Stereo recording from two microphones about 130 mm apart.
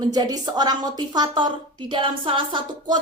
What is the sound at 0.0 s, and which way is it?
A woman's voice, 30° right (ahead or behind).